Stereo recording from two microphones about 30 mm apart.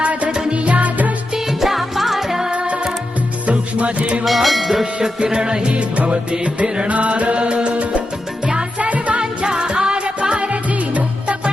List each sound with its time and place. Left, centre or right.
0.0 s music: right
1.6 s music: centre
3.5 s music: right
4.3 s speech: centre
5.2 s music: right
6.8 s music: right
9.1 s music: right